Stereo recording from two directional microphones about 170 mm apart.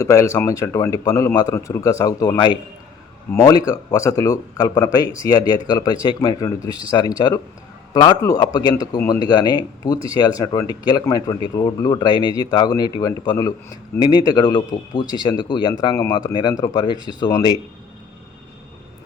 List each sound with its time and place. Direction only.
0.0 s speech: 15° left (ahead or behind)